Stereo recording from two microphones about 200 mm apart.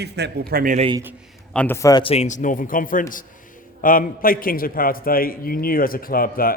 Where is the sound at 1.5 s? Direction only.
10° left (ahead or behind).